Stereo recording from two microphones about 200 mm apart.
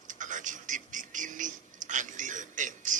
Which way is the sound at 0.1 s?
40° right (ahead or behind).